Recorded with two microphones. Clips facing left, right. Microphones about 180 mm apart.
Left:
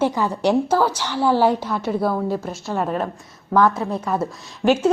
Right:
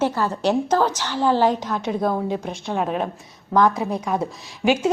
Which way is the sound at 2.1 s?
15° right (ahead or behind).